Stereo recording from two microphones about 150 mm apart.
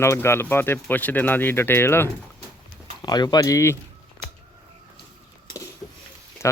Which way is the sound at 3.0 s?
30° left (ahead or behind).